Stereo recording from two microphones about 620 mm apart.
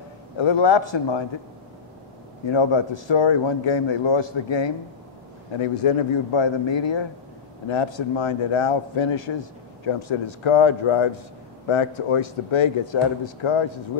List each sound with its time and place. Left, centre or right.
0.4 s a man's voice: left
2.4 s a man's voice: left